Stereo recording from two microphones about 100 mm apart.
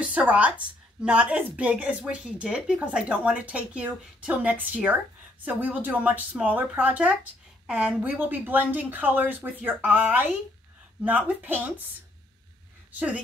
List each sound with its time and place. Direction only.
0.0 s speech: 15° right (ahead or behind)